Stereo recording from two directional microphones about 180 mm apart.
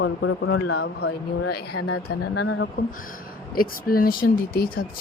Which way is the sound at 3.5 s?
55° left (ahead or behind).